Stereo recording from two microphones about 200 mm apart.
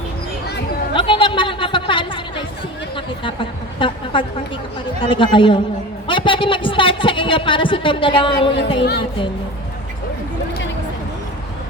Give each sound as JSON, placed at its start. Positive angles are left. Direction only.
{"t": 0.9, "sound": "chatter", "side_deg": 25}
{"t": 3.8, "sound": "a sound", "side_deg": 25}
{"t": 4.9, "sound": "a woman's voice", "side_deg": 25}
{"t": 8.8, "sound": "a woman's voice", "side_deg": 55}